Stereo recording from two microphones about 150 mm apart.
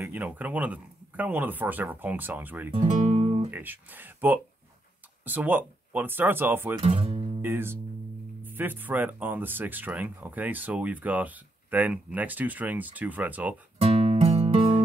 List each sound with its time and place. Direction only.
0.0 s speech: 10° right (ahead or behind)
3.1 s guitar: 40° right (ahead or behind)
3.4 s speech: 15° right (ahead or behind)
6.8 s speech: 40° right (ahead or behind)
7.4 s speech: 15° right (ahead or behind)
13.7 s music: 40° right (ahead or behind)